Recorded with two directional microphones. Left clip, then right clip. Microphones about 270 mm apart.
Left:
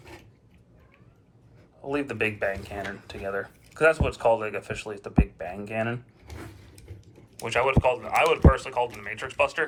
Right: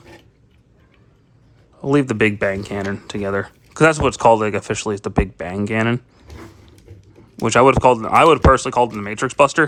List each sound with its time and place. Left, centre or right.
1.8 s speech: right
7.4 s speech: centre